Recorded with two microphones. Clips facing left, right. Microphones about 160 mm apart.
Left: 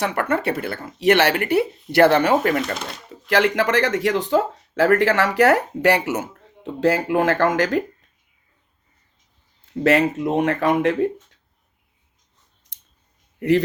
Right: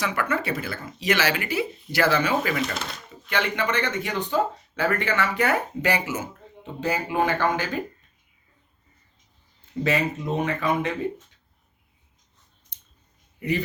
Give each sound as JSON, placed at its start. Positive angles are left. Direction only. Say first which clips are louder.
{"t": 0.0, "sound": "speech", "louder": "left 5 dB", "side_deg": 60}
{"t": 3.1, "sound": "speech", "louder": "left 9 dB", "side_deg": 85}
{"t": 6.7, "sound": "speech", "louder": "left 6 dB", "side_deg": 90}
{"t": 9.8, "sound": "speech", "louder": "left 7 dB", "side_deg": 80}